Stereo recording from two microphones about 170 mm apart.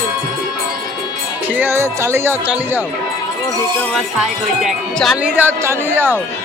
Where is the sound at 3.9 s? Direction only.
Centre (ahead or behind).